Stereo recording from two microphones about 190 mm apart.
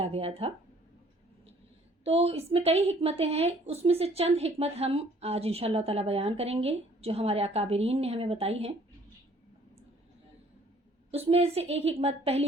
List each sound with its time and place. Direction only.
0.0 s speech: 30° right (ahead or behind)
2.0 s a woman's voice: 30° right (ahead or behind)
11.1 s a woman's voice: 30° right (ahead or behind)